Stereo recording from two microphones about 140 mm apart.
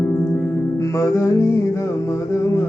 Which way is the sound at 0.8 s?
20° left (ahead or behind).